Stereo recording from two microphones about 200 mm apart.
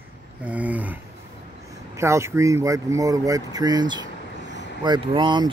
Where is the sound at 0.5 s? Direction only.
5° right (ahead or behind).